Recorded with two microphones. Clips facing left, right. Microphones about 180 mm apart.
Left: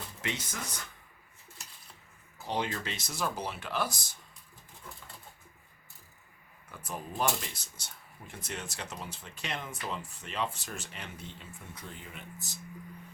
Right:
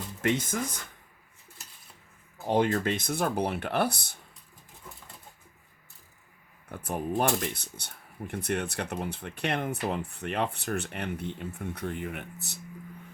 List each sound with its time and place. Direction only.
0.2 s speech: 50° right (ahead or behind)
2.5 s speech: 50° right (ahead or behind)
6.7 s speech: 55° right (ahead or behind)